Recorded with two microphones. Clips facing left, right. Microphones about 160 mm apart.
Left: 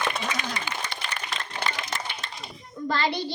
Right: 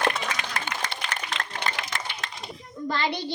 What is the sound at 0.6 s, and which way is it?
Applause, 80° right.